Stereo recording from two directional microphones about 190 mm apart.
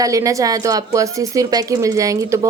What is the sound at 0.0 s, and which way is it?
A woman's voice, 15° right (ahead or behind).